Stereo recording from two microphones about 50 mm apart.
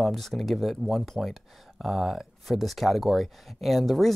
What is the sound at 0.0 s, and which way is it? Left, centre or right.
Speech, centre.